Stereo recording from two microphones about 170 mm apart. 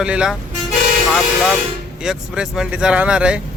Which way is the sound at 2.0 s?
5° right (ahead or behind).